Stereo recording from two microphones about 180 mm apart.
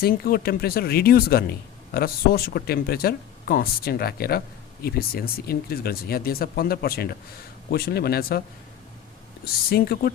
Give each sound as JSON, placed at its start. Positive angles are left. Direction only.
{"t": 0.0, "sound": "speech", "side_deg": 55}
{"t": 9.5, "sound": "speech", "side_deg": 60}